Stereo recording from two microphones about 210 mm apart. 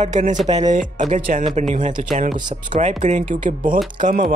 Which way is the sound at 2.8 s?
35° right (ahead or behind).